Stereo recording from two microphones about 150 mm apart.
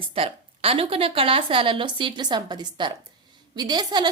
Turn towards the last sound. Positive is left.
turn(degrees=-30)  # may be behind; listen again after turning